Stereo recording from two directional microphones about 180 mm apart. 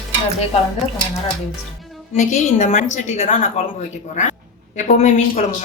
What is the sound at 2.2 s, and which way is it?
A woman's voice, 45° left (ahead or behind).